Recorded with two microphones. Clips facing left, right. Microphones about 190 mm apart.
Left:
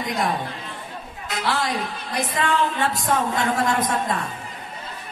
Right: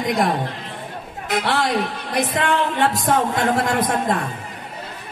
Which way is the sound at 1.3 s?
50° right (ahead or behind).